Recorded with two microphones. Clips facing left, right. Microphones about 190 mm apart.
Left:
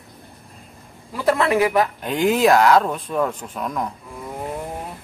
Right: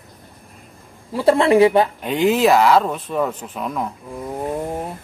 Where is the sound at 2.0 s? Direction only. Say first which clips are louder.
Right 1 dB; centre (ahead or behind).